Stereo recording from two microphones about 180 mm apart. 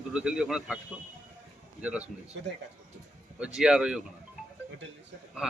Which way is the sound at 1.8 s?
5° right (ahead or behind).